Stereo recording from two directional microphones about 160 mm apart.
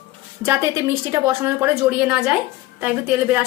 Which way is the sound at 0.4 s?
20° right (ahead or behind).